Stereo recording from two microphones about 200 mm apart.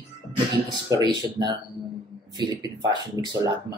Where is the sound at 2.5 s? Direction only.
20° right (ahead or behind).